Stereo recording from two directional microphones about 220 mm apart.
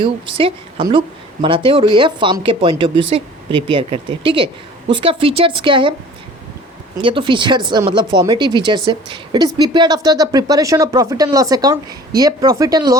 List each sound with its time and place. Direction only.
0.0 s a woman's voice: 20° right (ahead or behind)
7.0 s a woman's voice: 20° right (ahead or behind)